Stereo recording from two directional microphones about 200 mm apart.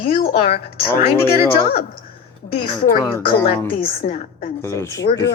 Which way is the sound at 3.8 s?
30° left (ahead or behind).